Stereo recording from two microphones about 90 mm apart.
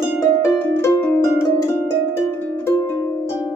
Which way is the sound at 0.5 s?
30° left (ahead or behind).